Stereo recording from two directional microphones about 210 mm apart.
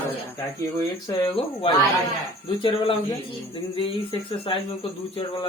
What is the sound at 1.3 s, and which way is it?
Speech, 25° left (ahead or behind).